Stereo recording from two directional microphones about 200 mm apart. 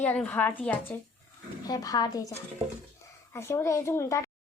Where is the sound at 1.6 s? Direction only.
20° left (ahead or behind).